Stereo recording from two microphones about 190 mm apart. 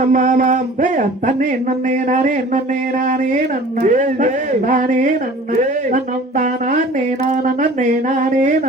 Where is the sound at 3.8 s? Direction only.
40° right (ahead or behind).